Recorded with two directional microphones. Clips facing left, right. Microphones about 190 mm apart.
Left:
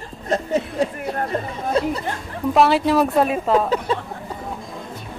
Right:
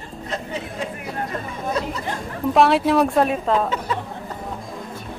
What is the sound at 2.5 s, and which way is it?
Speech, centre (ahead or behind).